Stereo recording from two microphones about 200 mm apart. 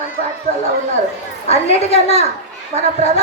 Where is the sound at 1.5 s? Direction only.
30° left (ahead or behind).